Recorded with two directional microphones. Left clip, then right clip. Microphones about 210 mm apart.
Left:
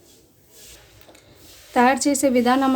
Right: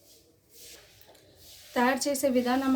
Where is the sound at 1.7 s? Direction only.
35° left (ahead or behind).